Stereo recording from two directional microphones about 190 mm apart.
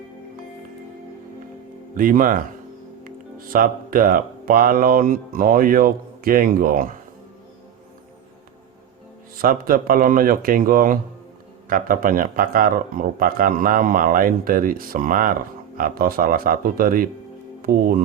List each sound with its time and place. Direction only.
2.0 s speech: 45° right (ahead or behind)
9.4 s speech: 50° right (ahead or behind)